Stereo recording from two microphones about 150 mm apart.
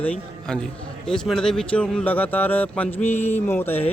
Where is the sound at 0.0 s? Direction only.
10° left (ahead or behind).